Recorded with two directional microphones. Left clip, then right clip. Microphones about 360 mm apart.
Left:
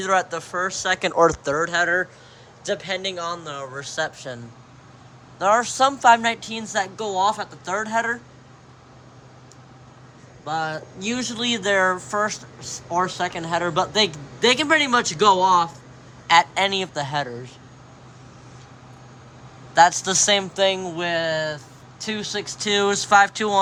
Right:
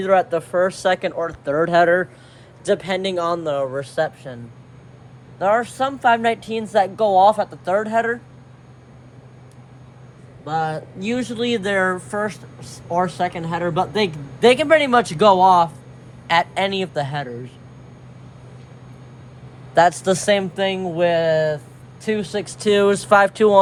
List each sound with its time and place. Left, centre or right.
0.0 s speech: centre
1.5 s a man's voice: centre
5.4 s speech: centre
10.4 s a man's voice: centre
19.7 s speech: centre